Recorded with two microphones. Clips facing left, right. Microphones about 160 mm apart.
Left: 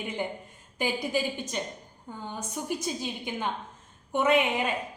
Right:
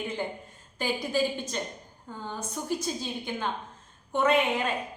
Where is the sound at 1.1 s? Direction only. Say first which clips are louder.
Right 2 dB; 15° left (ahead or behind).